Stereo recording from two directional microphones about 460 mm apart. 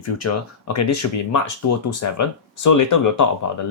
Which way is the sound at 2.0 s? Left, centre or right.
Left.